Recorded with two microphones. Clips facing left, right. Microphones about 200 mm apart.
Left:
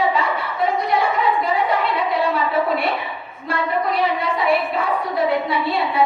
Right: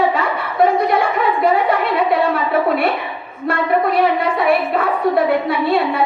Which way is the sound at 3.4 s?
55° right (ahead or behind).